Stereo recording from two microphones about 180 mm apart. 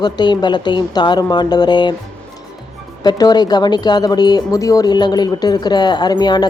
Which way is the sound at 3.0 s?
20° left (ahead or behind).